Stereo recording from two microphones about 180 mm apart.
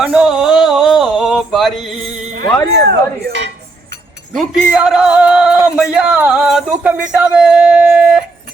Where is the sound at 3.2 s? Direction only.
75° right (ahead or behind).